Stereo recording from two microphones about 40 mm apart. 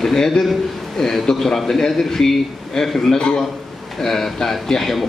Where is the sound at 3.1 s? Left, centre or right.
Left.